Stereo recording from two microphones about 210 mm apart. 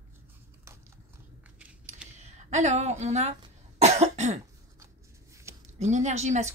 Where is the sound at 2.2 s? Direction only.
30° right (ahead or behind).